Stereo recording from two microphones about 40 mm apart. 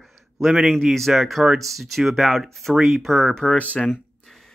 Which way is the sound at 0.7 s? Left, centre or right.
Centre.